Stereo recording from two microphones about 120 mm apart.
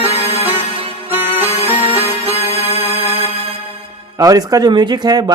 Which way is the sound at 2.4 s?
60° left (ahead or behind).